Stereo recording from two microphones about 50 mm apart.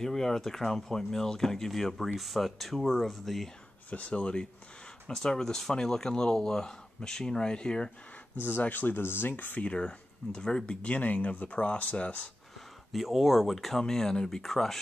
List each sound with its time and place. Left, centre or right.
0.0 s speech: centre
3.9 s speech: left
8.4 s speech: left
9.7 s speech: centre
12.5 s speech: centre